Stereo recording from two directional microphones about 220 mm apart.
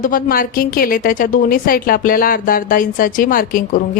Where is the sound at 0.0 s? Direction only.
40° left (ahead or behind).